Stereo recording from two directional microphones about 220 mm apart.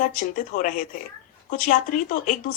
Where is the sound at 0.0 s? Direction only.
35° left (ahead or behind).